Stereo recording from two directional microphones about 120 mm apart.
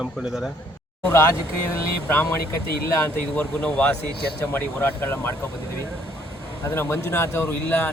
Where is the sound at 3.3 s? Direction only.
10° left (ahead or behind).